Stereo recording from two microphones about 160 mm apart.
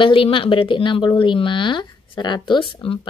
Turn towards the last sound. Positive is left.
turn(degrees=30)  # may be behind; listen again after turning